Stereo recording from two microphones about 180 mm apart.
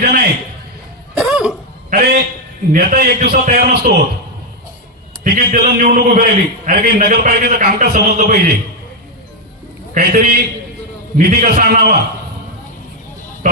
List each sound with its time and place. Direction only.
0.0 s a sound: 55° right (ahead or behind)
1.1 s cough: 5° right (ahead or behind)
1.9 s a sound: 50° right (ahead or behind)
2.7 s a man's voice: 55° right (ahead or behind)
5.2 s a man's voice: 50° right (ahead or behind)
9.9 s a man's voice: 55° right (ahead or behind)